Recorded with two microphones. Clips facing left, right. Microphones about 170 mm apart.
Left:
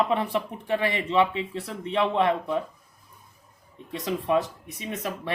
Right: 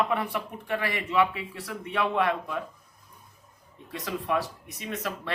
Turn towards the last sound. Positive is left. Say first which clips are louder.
# left 2 dB
turn(degrees=20)  # may be behind; listen again after turning